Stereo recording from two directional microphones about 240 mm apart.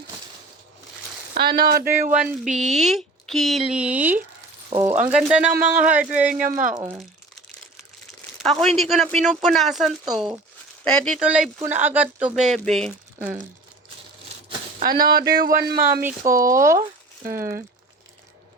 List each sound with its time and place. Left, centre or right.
1.3 s speech: right
2.0 s speech: centre
6.3 s speech: right
6.7 s speech: centre
8.4 s speech: centre
14.8 s speech: right
15.9 s speech: centre